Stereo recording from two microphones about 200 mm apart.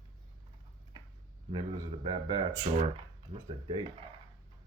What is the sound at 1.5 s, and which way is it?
Speech, 20° right (ahead or behind).